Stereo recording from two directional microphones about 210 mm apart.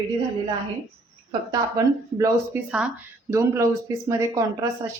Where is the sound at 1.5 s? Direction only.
15° right (ahead or behind).